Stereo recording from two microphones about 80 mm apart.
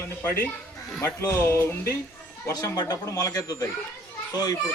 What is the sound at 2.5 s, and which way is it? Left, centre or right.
A child's voice, left.